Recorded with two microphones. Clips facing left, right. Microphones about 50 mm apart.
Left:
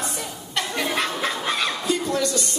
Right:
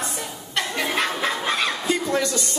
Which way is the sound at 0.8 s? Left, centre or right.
Centre.